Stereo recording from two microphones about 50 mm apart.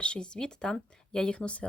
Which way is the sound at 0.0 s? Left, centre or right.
Centre.